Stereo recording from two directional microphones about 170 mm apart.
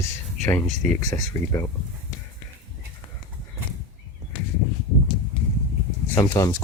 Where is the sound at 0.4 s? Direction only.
15° left (ahead or behind).